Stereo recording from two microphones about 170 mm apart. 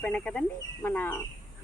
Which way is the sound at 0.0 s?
5° left (ahead or behind).